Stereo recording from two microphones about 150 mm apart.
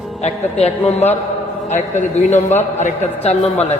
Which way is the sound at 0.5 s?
45° left (ahead or behind).